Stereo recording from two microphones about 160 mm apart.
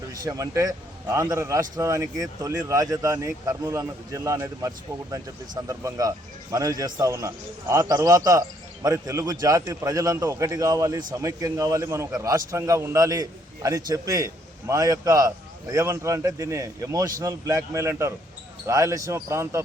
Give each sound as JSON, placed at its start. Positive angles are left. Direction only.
{"t": 0.1, "sound": "speech", "side_deg": -20}